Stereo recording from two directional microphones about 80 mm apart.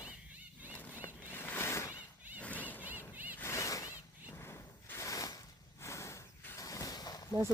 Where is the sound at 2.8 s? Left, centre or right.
Right.